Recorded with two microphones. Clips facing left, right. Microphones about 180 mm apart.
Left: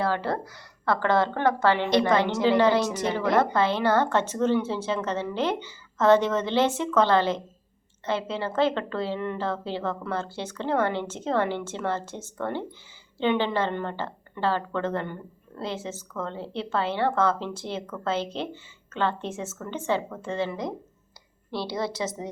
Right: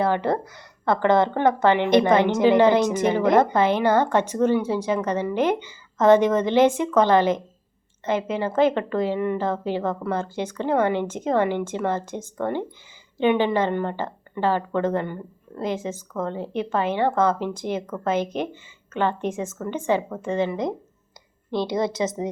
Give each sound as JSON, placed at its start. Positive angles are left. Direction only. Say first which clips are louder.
{"t": 0.0, "sound": "a woman's voice", "louder": "right 5 dB", "side_deg": -20}